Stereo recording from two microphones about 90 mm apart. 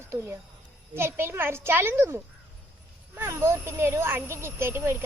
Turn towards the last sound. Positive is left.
turn(degrees=-25)  # may be behind; listen again after turning